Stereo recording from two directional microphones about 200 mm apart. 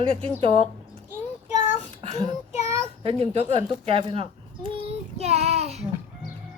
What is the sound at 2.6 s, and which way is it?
Child singing, 15° right (ahead or behind).